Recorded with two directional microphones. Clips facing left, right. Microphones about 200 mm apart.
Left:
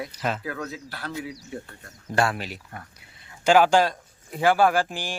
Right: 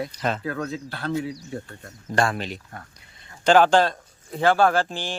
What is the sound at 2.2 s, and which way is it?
Speech, 5° left (ahead or behind).